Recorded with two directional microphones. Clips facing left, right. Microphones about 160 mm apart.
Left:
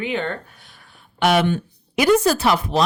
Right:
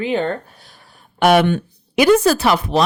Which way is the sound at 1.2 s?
55° right (ahead or behind).